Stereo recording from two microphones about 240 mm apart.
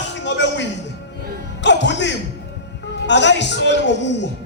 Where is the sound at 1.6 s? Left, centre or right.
Left.